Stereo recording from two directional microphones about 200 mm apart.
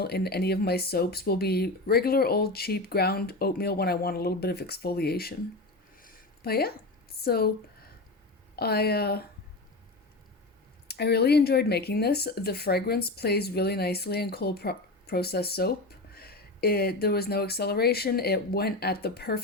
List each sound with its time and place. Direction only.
0.0 s speech: 55° left (ahead or behind)
6.0 s a sound: 50° left (ahead or behind)
7.2 s speech: 50° left (ahead or behind)
8.5 s speech: 50° left (ahead or behind)
10.8 s speech: 55° left (ahead or behind)